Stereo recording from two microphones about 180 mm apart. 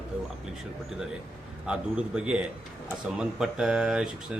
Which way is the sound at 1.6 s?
5° right (ahead or behind).